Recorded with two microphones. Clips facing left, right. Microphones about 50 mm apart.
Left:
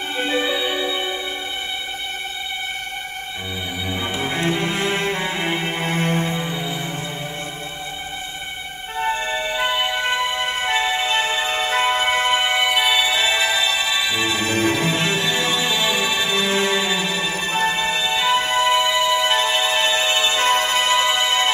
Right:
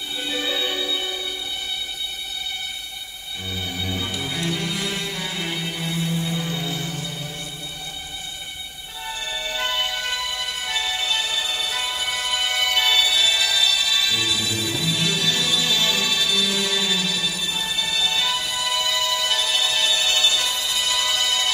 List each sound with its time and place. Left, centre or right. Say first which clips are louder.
0.2 s music: left 7 dB; left
0.5 s music: left 3 dB; centre
3.8 s music: left 5 dB; left
6.3 s music: left 2 dB; left
9.0 s music: left 8 dB; left